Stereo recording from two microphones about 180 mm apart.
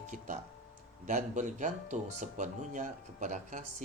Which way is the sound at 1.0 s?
45° right (ahead or behind).